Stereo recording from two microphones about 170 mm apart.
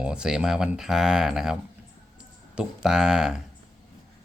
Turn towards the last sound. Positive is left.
turn(degrees=-5)  # may be behind; listen again after turning